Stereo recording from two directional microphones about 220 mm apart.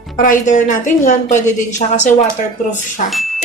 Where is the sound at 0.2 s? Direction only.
35° left (ahead or behind).